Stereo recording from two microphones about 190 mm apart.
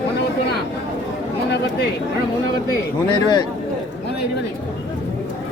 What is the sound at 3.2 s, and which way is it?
Speech, 20° left (ahead or behind).